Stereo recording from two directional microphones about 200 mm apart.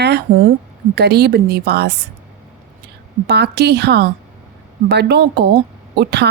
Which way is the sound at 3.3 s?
55° right (ahead or behind).